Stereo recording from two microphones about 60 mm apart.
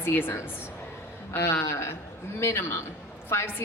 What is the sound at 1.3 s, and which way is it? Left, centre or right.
A woman's voice, left.